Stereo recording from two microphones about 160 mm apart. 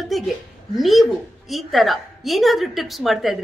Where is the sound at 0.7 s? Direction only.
Centre (ahead or behind).